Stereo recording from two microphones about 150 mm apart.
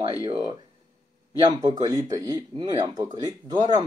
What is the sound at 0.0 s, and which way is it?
Speech, 20° right (ahead or behind).